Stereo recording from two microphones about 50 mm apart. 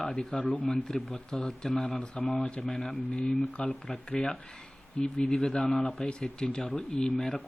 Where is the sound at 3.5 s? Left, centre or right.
Left.